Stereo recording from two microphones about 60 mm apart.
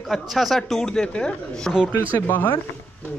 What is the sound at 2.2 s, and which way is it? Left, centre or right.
Speech, left.